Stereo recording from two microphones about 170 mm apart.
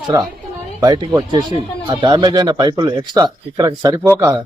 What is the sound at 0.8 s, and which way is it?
Speech, 25° right (ahead or behind).